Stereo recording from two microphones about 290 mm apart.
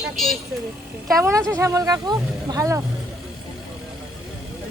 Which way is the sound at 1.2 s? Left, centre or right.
Centre.